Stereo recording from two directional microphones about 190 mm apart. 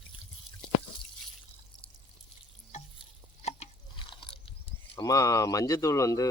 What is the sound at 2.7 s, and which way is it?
Stir, 40° left (ahead or behind).